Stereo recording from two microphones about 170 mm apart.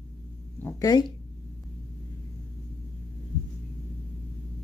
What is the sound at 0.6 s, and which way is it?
Speech, 15° left (ahead or behind).